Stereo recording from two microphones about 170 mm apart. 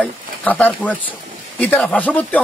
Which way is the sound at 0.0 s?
10° left (ahead or behind).